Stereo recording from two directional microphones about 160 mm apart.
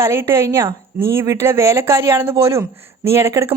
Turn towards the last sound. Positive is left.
turn(degrees=-20)  # may be behind; listen again after turning